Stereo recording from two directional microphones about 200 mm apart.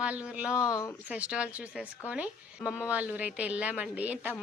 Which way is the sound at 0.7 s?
15° left (ahead or behind).